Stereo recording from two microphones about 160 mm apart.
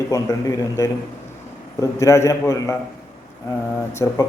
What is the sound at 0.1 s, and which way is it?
A man's voice, 20° left (ahead or behind).